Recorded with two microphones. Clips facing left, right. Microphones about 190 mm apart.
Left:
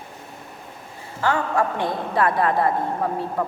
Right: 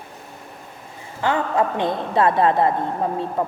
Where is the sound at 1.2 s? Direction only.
20° right (ahead or behind).